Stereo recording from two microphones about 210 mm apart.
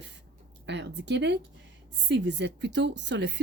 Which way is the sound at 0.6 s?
55° right (ahead or behind).